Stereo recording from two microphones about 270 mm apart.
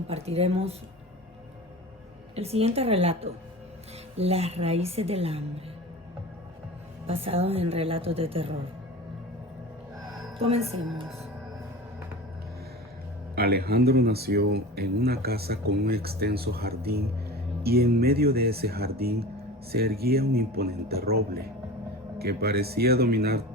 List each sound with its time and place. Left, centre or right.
0.1 s a woman's voice: right
2.3 s a woman's voice: right
7.1 s a woman's voice: right
10.5 s a woman's voice: right
13.3 s speech: right
22.2 s speech: right